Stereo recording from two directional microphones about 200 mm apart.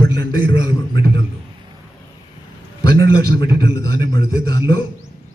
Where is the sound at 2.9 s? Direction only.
20° left (ahead or behind).